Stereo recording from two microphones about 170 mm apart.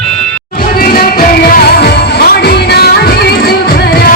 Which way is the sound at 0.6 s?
60° left (ahead or behind).